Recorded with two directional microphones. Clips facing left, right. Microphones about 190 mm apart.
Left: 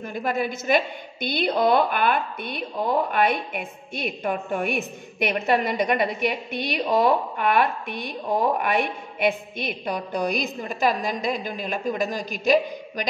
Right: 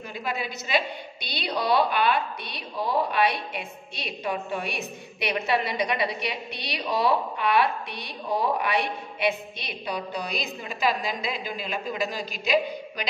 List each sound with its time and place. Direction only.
0.1 s a woman's voice: 50° left (ahead or behind)